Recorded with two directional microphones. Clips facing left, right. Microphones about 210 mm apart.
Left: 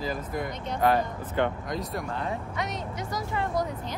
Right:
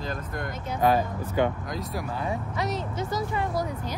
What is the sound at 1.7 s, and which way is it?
Speech, centre (ahead or behind).